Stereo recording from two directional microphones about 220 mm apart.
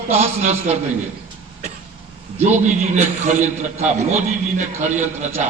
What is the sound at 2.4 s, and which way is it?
A man's voice, 30° right (ahead or behind).